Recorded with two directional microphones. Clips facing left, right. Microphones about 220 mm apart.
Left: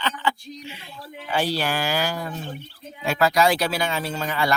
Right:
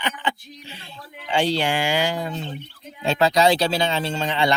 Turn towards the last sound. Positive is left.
turn(degrees=-20)  # may be behind; listen again after turning